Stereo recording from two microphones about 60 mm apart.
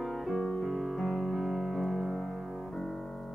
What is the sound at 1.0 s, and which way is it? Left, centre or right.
Music, centre.